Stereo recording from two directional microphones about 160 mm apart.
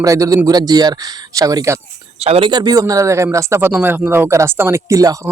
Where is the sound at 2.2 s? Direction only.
35° right (ahead or behind).